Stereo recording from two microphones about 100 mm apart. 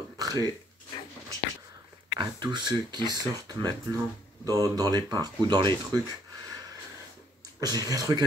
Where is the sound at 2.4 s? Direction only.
50° right (ahead or behind).